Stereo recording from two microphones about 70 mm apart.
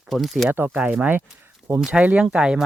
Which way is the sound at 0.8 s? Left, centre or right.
Centre.